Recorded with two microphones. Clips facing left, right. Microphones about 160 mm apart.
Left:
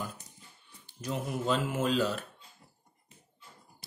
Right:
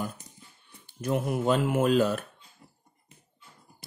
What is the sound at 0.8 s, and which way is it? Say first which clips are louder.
Speech: right 7 dB; 55° right (ahead or behind).